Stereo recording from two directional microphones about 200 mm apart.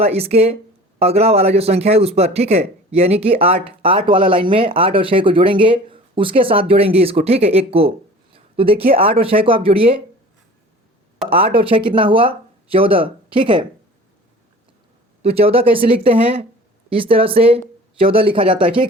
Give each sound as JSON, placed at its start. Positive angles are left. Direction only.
{"t": 0.0, "sound": "a man's voice", "side_deg": -30}
{"t": 11.3, "sound": "a man's voice", "side_deg": -30}
{"t": 15.2, "sound": "a man's voice", "side_deg": -30}